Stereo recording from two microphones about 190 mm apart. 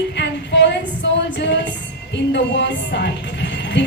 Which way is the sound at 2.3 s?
65° left (ahead or behind).